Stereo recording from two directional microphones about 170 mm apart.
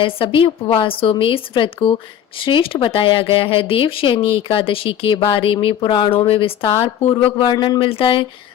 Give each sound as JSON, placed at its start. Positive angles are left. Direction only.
{"t": 0.0, "sound": "speech", "side_deg": 30}